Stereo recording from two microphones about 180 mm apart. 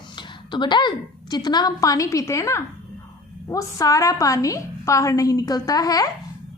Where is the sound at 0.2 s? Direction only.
25° left (ahead or behind).